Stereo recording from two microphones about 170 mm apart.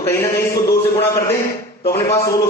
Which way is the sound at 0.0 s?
15° left (ahead or behind).